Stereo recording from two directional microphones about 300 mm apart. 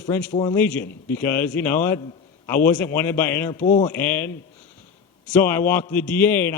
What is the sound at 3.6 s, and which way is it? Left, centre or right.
Speech, left.